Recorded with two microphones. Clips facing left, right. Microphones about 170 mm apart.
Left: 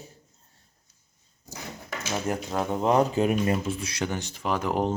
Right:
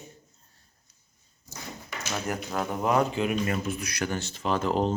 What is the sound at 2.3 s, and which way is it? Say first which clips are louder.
Speech: left 3 dB; 20° left (ahead or behind).